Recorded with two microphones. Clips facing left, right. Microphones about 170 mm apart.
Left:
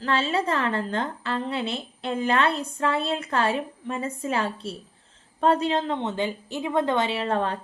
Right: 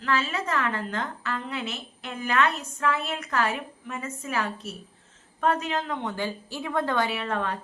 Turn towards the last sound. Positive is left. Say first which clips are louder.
# left 4 dB
turn(degrees=30)  # may be behind; listen again after turning